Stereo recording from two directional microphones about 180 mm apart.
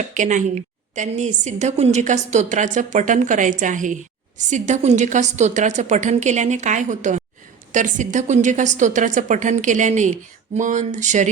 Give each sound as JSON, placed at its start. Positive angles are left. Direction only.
{"t": 0.1, "sound": "a woman's voice", "side_deg": -45}